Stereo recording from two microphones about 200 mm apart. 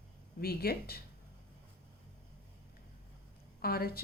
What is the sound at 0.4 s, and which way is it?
Speech, 50° left (ahead or behind).